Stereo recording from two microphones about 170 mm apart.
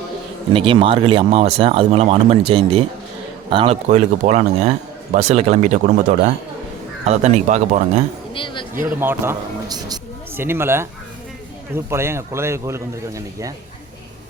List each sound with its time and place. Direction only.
0.5 s speech: 30° right (ahead or behind)
3.5 s speech: 30° right (ahead or behind)
3.8 s speech: 40° right (ahead or behind)
8.3 s a sound: 30° left (ahead or behind)
8.8 s speech: 15° right (ahead or behind)
11.9 s a man's voice: 15° right (ahead or behind)